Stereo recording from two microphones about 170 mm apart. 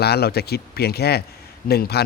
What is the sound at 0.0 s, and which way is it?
Speech, 70° left (ahead or behind).